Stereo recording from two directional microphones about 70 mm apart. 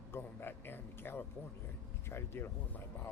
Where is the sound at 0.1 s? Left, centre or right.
Left.